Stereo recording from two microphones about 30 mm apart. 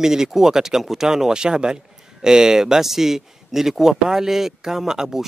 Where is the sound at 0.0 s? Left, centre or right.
Centre.